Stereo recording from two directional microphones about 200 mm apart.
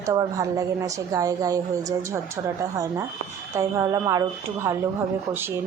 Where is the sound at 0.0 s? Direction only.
20° right (ahead or behind).